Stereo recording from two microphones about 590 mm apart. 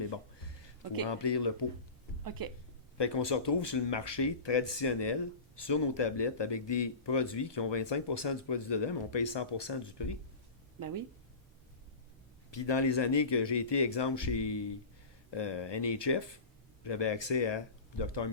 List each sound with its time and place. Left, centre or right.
1.0 s speech: left
3.0 s speech: left
10.8 s speech: right
12.5 s speech: left